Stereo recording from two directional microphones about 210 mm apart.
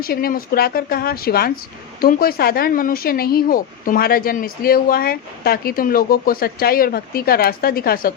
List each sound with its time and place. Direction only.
0.0 s speech: 45° left (ahead or behind)